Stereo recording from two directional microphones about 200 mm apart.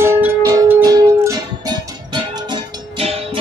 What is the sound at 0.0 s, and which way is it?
Music, 15° right (ahead or behind).